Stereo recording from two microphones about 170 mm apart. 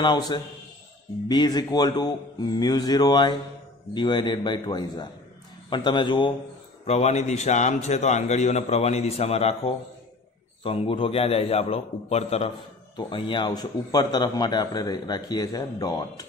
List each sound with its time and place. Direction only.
0.0 s a man's voice: 25° left (ahead or behind)
6.9 s a man's voice: 40° left (ahead or behind); by 16.3 s 20° left (ahead or behind)